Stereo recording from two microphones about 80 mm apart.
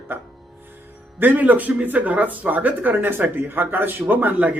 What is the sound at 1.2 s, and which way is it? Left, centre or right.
Speech, right.